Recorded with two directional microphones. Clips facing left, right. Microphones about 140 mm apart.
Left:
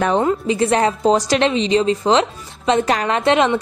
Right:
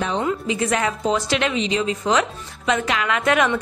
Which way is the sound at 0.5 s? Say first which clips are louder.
Left 5 dB; 35° left (ahead or behind).